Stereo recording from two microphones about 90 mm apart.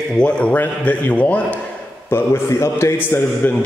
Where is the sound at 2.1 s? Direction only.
30° left (ahead or behind).